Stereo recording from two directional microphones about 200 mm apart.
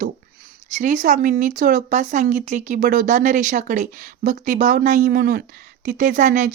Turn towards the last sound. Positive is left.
turn(degrees=-40)  # may be behind; listen again after turning